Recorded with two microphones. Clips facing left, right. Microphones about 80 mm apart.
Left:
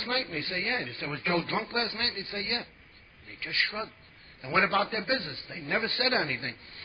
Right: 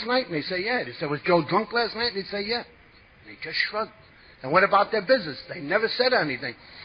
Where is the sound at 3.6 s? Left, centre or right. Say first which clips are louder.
Right 7 dB; right.